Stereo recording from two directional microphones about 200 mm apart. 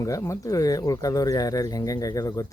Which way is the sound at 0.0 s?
15° left (ahead or behind).